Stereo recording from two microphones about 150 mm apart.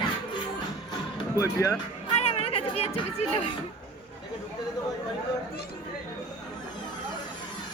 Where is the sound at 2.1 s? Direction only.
40° left (ahead or behind).